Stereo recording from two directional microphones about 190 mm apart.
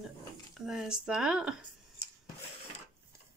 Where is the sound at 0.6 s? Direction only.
Centre (ahead or behind).